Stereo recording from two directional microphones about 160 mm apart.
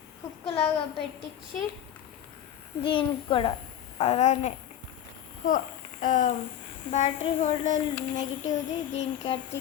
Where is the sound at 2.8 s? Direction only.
35° left (ahead or behind).